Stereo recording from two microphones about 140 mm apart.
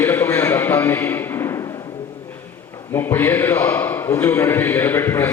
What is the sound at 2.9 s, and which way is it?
A man's voice, 15° left (ahead or behind).